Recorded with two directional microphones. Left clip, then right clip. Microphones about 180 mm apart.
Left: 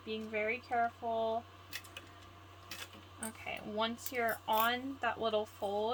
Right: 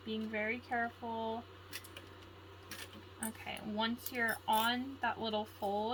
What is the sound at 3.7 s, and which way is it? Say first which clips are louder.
Speech: left 2 dB; 40° left (ahead or behind).